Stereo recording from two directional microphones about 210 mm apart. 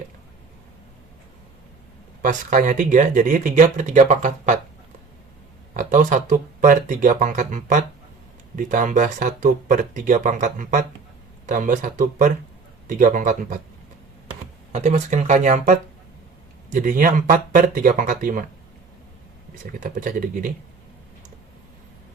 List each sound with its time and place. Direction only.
2.2 s speech: 35° right (ahead or behind)
5.7 s speech: 40° right (ahead or behind)
14.7 s speech: 35° right (ahead or behind)
19.8 s speech: 40° right (ahead or behind)